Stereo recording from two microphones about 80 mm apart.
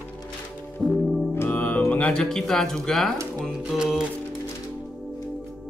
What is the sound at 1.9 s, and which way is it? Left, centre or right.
Speech, centre.